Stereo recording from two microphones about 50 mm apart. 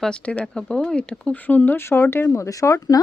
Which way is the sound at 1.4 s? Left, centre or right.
Left.